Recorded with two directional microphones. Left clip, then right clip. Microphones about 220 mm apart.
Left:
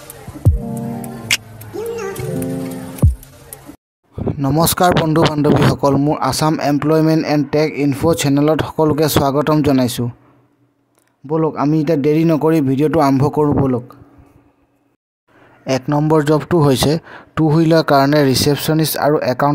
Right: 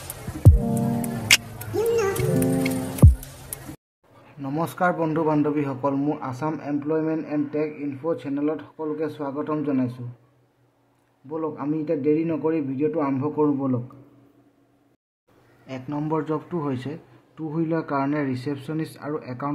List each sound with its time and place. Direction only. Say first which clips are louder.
0.4 s music: even; centre (ahead or behind)
4.4 s a man's voice: left 10 dB; 45° left (ahead or behind)
11.2 s a man's voice: left 11 dB; 55° left (ahead or behind)
15.6 s a man's voice: left 14 dB; 50° left (ahead or behind)